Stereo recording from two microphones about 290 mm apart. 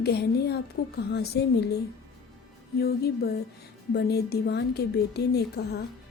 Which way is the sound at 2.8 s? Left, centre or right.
Left.